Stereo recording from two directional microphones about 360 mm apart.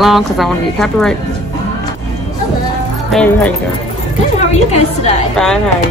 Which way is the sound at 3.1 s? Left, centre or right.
Centre.